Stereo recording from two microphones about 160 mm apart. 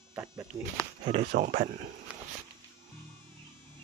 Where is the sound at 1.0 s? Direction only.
30° right (ahead or behind).